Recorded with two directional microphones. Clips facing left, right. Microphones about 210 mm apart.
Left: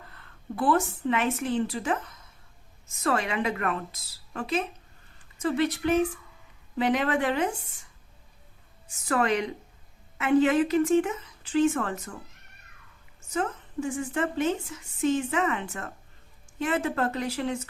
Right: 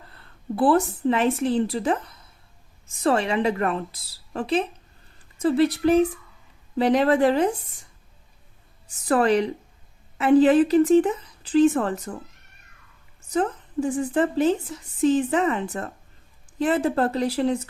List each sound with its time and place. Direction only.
0.1 s a woman's voice: 35° right (ahead or behind)
9.0 s a woman's voice: 35° right (ahead or behind)
13.3 s a woman's voice: 35° right (ahead or behind)